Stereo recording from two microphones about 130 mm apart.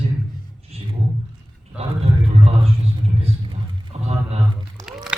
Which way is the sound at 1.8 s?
45° right (ahead or behind).